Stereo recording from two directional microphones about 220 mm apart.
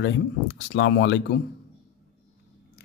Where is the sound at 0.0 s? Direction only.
55° left (ahead or behind).